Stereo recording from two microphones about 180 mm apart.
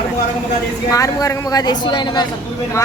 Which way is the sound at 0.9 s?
20° left (ahead or behind).